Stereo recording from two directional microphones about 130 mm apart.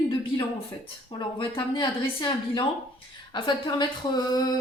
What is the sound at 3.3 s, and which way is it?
Speech, 40° left (ahead or behind).